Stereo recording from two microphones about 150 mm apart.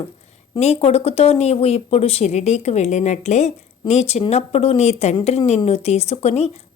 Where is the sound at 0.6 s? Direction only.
45° left (ahead or behind).